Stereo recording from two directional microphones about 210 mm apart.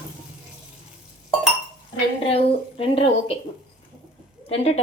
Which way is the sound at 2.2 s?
25° left (ahead or behind).